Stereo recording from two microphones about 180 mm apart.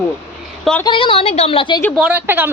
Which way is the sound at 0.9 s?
30° left (ahead or behind).